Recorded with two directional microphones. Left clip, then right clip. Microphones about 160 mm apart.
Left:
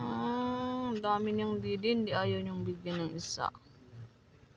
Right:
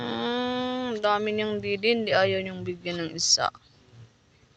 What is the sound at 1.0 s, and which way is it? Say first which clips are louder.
Speech: right 8 dB; 20° right (ahead or behind).